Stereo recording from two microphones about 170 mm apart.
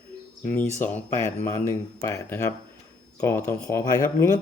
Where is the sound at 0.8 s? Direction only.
10° left (ahead or behind).